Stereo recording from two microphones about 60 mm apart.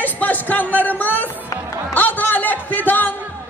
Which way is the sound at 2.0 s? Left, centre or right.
Left.